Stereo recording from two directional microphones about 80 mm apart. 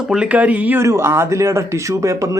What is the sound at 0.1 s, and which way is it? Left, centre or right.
Speech, centre.